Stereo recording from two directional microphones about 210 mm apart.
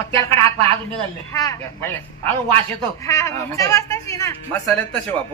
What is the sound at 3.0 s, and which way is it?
Speech, 15° left (ahead or behind).